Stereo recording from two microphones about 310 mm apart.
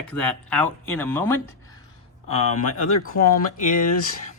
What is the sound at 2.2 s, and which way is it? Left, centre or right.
Speech, centre.